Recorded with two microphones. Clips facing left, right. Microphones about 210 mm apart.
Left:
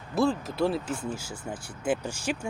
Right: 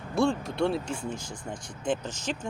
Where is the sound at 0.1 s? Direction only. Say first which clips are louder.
Even; centre (ahead or behind).